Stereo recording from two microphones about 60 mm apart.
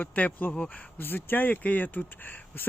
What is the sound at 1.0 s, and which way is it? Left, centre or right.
Speech, left.